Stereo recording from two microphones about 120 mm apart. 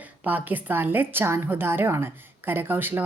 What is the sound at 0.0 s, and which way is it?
A woman's voice, 15° right (ahead or behind).